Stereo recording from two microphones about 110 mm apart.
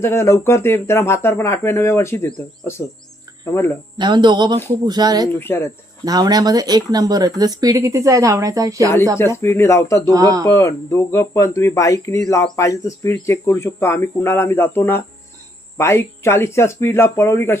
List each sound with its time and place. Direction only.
0.0 s speech: 25° left (ahead or behind)
3.9 s speech: 45° right (ahead or behind)
5.4 s speech: 20° left (ahead or behind)
6.1 s speech: 35° right (ahead or behind)
9.1 s speech: 25° left (ahead or behind)
10.1 s speech: 30° right (ahead or behind)
10.5 s speech: 25° left (ahead or behind)